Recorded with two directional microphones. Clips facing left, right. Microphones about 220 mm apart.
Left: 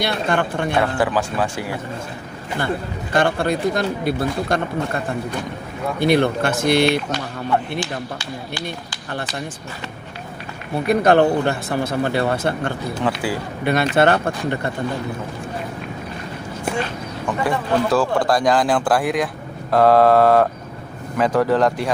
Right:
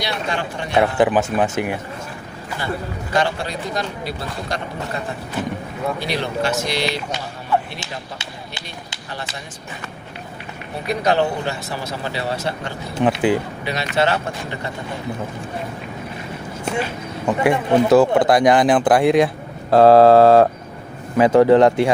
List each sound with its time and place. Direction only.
0.0 s speech: 55° left (ahead or behind)
0.8 s speech: 20° right (ahead or behind)
3.1 s speech: 55° left (ahead or behind)
6.0 s speech: 55° left (ahead or behind)
7.8 s speech: 25° right (ahead or behind)
10.8 s speech: 55° left (ahead or behind)
12.9 s speech: 25° right (ahead or behind)
13.7 s speech: 55° left (ahead or behind)
17.2 s speech: 20° right (ahead or behind)